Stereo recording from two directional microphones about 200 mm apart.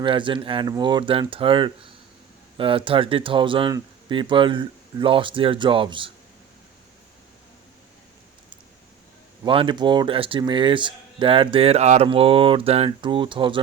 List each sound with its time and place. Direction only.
0.0 s speech: 25° right (ahead or behind)
9.4 s speech: 25° right (ahead or behind)